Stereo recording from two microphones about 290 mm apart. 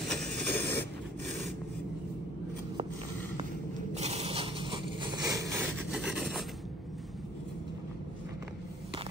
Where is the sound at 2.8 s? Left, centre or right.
Right; by 6.5 s centre.